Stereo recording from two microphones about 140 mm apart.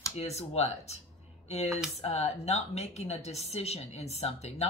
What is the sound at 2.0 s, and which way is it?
A woman's voice, 50° left (ahead or behind).